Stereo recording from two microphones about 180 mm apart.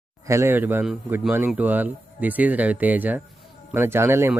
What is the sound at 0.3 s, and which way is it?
A man's voice, 15° right (ahead or behind).